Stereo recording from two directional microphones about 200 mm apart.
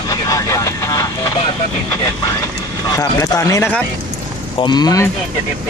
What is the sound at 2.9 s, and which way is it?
Speech, 15° left (ahead or behind).